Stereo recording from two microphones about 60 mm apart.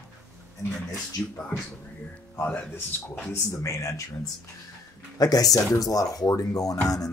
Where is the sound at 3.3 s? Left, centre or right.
Left.